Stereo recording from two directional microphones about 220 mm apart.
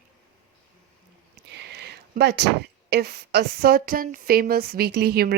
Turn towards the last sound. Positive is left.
turn(degrees=-45)  # may be behind; listen again after turning